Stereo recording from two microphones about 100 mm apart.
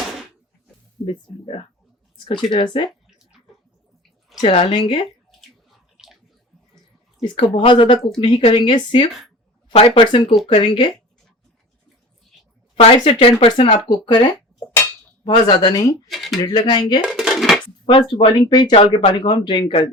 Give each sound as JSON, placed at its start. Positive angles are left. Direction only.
{"t": 1.0, "sound": "speech", "side_deg": 65}
{"t": 2.1, "sound": "speech", "side_deg": 55}
{"t": 4.4, "sound": "speech", "side_deg": 55}
{"t": 6.0, "sound": "bathtub", "side_deg": -5}
{"t": 7.2, "sound": "speech", "side_deg": 65}
{"t": 9.7, "sound": "speech", "side_deg": 75}
{"t": 12.8, "sound": "speech", "side_deg": 70}
{"t": 14.0, "sound": "speech", "side_deg": 55}
{"t": 16.0, "sound": "speech", "side_deg": 0}
{"t": 16.4, "sound": "speech", "side_deg": 45}
{"t": 17.1, "sound": "dishes", "side_deg": 0}
{"t": 17.8, "sound": "speech", "side_deg": 55}